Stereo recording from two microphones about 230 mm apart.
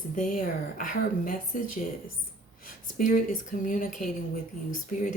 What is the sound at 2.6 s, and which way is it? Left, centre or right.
A woman's voice, left.